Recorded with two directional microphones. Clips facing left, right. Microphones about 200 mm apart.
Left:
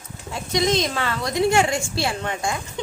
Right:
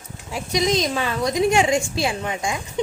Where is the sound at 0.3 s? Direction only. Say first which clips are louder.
Even; 15° right (ahead or behind).